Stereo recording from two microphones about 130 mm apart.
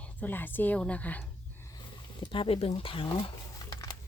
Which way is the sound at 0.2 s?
15° left (ahead or behind).